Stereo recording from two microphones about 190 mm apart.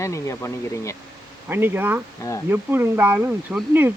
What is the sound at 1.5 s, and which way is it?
Speech, 10° right (ahead or behind).